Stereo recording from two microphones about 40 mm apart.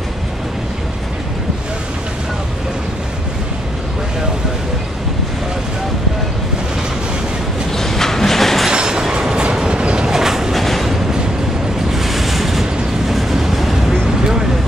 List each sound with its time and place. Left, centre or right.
7.7 s train: centre
8.6 s train: centre
10.1 s train: centre
10.5 s train: centre
11.9 s waves: centre
13.1 s train: centre